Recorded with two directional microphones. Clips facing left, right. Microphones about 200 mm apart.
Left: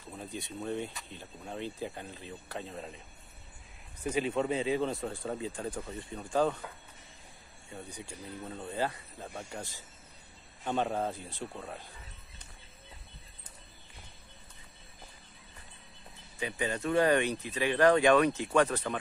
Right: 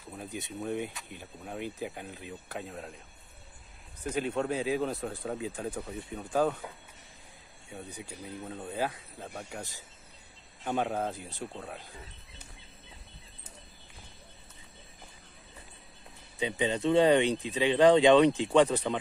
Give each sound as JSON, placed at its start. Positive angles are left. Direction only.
{"t": 0.1, "sound": "a sound", "side_deg": -5}
{"t": 0.6, "sound": "speech", "side_deg": -10}
{"t": 4.0, "sound": "speech", "side_deg": 5}
{"t": 7.7, "sound": "speech", "side_deg": -5}
{"t": 16.3, "sound": "speech", "side_deg": -20}